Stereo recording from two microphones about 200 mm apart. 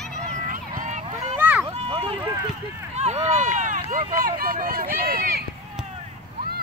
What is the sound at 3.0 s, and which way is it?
Run, 35° right (ahead or behind).